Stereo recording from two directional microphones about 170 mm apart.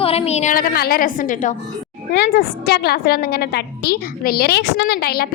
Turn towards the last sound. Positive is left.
turn(degrees=65)  # may be behind; listen again after turning